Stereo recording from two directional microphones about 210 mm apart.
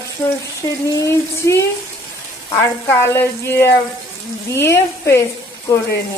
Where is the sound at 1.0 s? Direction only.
15° left (ahead or behind).